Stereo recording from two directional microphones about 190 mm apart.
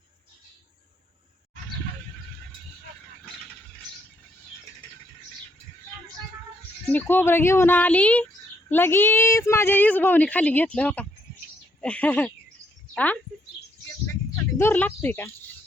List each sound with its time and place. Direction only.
6.8 s a woman's voice: 10° left (ahead or behind)
14.6 s a woman's voice: 10° left (ahead or behind)